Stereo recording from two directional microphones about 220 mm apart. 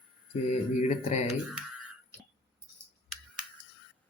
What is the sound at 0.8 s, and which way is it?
Speech, 30° left (ahead or behind).